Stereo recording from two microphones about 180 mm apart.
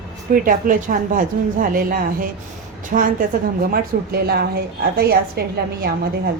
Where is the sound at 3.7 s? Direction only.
60° right (ahead or behind).